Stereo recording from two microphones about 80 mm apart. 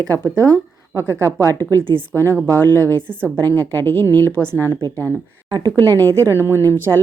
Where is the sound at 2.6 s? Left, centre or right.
Left.